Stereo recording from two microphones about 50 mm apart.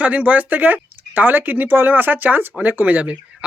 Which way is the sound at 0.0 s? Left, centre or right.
Right.